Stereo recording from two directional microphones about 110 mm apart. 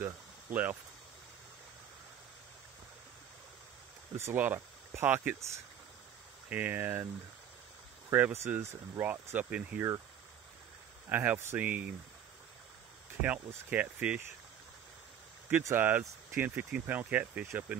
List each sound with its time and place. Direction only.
0.0 s speech: 15° right (ahead or behind)
4.1 s speech: 25° right (ahead or behind)
8.1 s speech: 25° right (ahead or behind)
11.1 s speech: 15° right (ahead or behind)
13.2 s speech: 15° right (ahead or behind)
15.6 s speech: 20° right (ahead or behind)